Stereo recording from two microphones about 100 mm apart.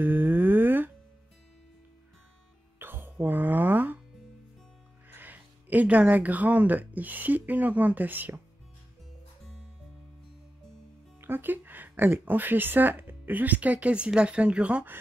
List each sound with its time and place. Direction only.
0.0 s a sound: 20° right (ahead or behind)
2.8 s music: 20° right (ahead or behind)
5.1 s speech: 20° right (ahead or behind)
11.1 s speech: 20° right (ahead or behind)